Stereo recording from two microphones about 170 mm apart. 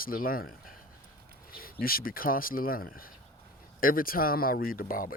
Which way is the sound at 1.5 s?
60° left (ahead or behind).